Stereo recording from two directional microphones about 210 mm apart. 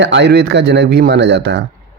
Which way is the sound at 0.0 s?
55° right (ahead or behind).